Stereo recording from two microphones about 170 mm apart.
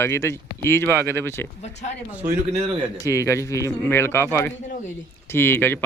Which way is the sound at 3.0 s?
15° left (ahead or behind).